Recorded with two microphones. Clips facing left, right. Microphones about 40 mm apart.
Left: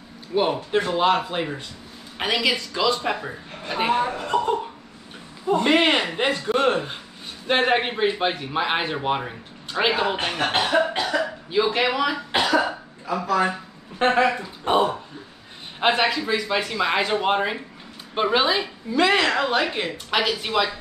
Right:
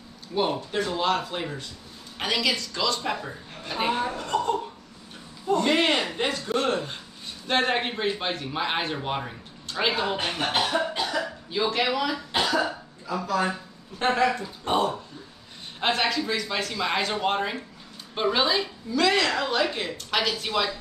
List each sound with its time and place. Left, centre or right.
0.3 s a man's voice: centre
10.5 s cough: left
11.5 s a man's voice: centre